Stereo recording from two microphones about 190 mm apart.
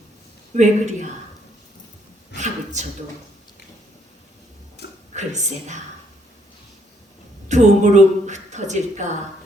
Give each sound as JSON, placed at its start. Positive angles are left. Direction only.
{"t": 0.5, "sound": "a woman's voice", "side_deg": -40}
{"t": 2.8, "sound": "a woman's voice", "side_deg": -40}
{"t": 5.1, "sound": "a woman's voice", "side_deg": -40}
{"t": 7.4, "sound": "a woman's voice", "side_deg": -40}